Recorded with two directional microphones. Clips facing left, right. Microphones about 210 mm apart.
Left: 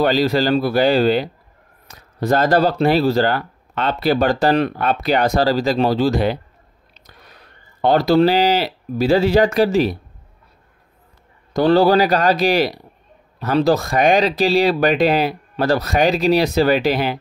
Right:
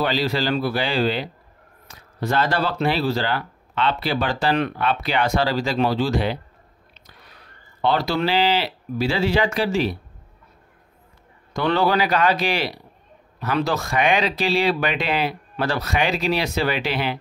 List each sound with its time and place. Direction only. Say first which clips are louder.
0.0 s speech: left 6 dB; 45° left (ahead or behind)
6.9 s a sound: left 4 dB; 45° left (ahead or behind)
7.8 s speech: left 8 dB; 40° left (ahead or behind)
11.5 s speech: left 7 dB; 35° left (ahead or behind)